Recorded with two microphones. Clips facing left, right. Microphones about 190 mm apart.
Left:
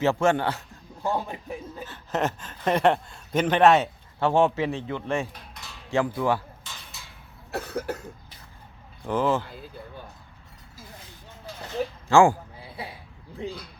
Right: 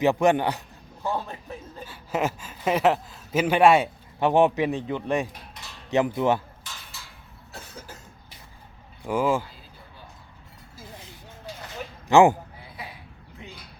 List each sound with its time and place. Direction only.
0.0 s speech: 15° right (ahead or behind)
1.0 s a man's voice: 15° left (ahead or behind)
1.8 s speech: 10° right (ahead or behind)
7.5 s cough: 65° left (ahead or behind)
9.0 s speech: 10° right (ahead or behind)
12.0 s speech: 20° right (ahead or behind)
12.8 s a sound: 30° left (ahead or behind)
13.4 s speech: 30° left (ahead or behind)